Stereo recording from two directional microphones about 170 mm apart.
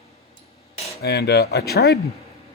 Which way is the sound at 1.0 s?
70° left (ahead or behind).